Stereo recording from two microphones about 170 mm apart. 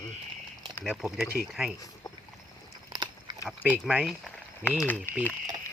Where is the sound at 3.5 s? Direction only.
5° right (ahead or behind).